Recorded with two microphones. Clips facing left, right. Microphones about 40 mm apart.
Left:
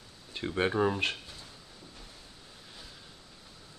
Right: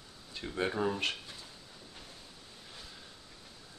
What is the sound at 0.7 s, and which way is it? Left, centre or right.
Speech, left.